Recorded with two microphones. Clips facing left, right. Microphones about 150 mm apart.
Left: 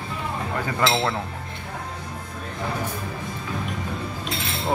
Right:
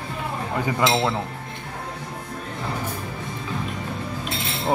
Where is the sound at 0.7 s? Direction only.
15° right (ahead or behind).